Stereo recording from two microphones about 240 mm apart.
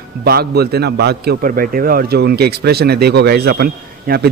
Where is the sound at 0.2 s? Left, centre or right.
Right.